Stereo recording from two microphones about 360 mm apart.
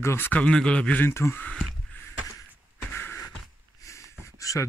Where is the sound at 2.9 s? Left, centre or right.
Centre.